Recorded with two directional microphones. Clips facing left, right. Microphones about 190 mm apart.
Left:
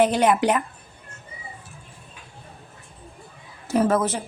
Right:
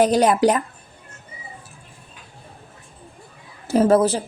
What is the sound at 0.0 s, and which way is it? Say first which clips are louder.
Speech: right 3 dB; 40° right (ahead or behind).